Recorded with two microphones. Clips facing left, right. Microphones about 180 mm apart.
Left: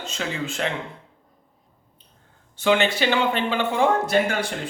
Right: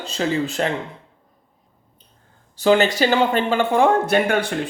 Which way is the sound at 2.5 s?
40° right (ahead or behind).